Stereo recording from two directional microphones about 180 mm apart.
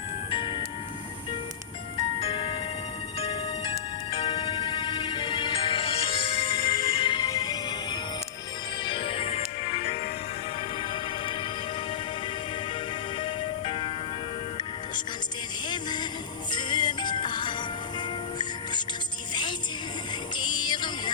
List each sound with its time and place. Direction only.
0.3 s music: 25° left (ahead or behind)
2.1 s music: 30° left (ahead or behind)
13.1 s music: 30° left (ahead or behind)
15.7 s music: 25° left (ahead or behind)
19.3 s music: 25° left (ahead or behind)